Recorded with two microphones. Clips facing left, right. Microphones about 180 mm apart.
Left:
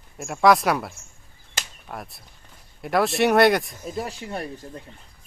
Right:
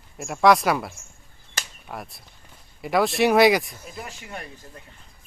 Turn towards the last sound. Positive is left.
turn(degrees=35)  # may be behind; listen again after turning